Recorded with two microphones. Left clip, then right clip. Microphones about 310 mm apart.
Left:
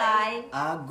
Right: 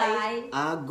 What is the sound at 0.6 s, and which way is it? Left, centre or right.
Speech, centre.